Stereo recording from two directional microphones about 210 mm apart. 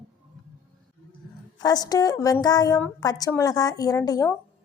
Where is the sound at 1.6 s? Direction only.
20° left (ahead or behind).